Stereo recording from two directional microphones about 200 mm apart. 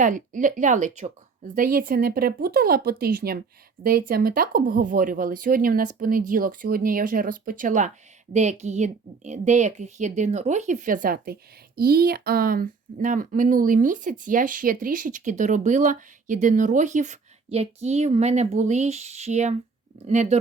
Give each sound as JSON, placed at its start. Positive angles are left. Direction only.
{"t": 0.0, "sound": "speech", "side_deg": -40}